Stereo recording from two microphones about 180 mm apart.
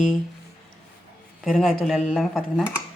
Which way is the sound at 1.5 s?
Centre (ahead or behind).